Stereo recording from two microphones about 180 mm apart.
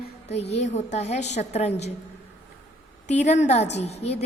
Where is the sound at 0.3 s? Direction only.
35° left (ahead or behind).